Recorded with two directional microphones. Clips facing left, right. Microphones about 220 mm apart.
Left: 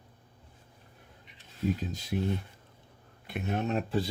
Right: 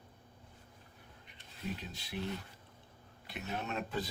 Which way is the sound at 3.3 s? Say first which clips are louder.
Left 8 dB; 50° left (ahead or behind).